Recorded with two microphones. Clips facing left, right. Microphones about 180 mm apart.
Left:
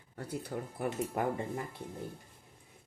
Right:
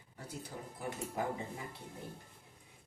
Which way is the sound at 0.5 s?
80° left.